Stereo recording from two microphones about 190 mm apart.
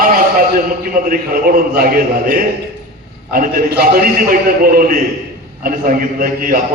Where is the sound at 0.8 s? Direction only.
50° right (ahead or behind).